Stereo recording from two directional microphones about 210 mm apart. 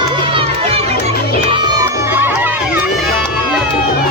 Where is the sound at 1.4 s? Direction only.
20° right (ahead or behind).